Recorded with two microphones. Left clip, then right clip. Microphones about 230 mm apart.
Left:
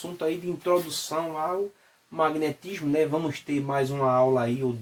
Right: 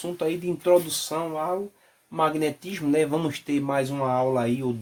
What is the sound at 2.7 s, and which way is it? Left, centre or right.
Speech, right.